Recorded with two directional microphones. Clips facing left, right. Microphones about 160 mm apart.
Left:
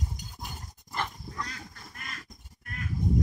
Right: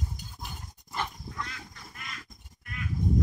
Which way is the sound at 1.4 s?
40° left (ahead or behind).